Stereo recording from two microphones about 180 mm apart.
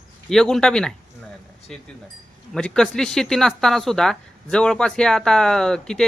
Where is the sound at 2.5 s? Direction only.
5° left (ahead or behind).